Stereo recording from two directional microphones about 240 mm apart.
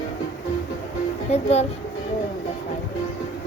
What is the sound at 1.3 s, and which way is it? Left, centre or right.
Speech, left.